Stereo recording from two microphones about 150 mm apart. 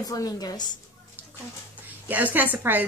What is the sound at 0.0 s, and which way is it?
Speech, 25° left (ahead or behind).